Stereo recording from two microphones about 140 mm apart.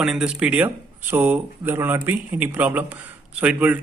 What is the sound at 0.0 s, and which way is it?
Speech, 5° right (ahead or behind).